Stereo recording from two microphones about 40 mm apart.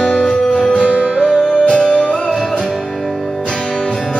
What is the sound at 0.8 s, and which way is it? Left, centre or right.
Music, right.